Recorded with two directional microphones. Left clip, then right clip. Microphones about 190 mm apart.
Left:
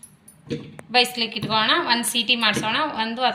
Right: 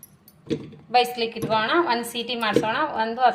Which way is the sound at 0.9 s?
45° right (ahead or behind).